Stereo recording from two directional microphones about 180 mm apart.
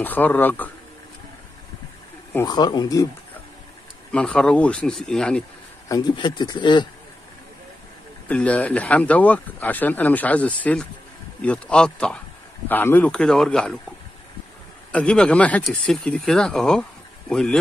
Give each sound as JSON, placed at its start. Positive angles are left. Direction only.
{"t": 0.0, "sound": "speech", "side_deg": 10}
{"t": 2.3, "sound": "speech", "side_deg": 20}
{"t": 4.1, "sound": "speech", "side_deg": 5}
{"t": 5.9, "sound": "speech", "side_deg": 20}
{"t": 8.3, "sound": "speech", "side_deg": 10}
{"t": 14.9, "sound": "speech", "side_deg": 5}